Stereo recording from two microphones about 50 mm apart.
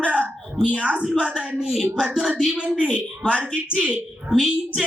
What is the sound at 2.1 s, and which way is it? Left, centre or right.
Speech, centre.